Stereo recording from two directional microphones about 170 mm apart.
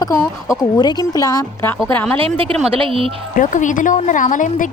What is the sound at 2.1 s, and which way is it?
Speech, 30° right (ahead or behind).